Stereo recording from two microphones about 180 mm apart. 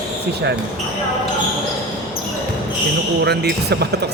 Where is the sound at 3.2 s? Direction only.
65° right (ahead or behind).